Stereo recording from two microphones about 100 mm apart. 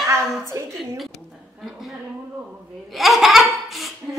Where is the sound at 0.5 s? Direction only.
30° right (ahead or behind).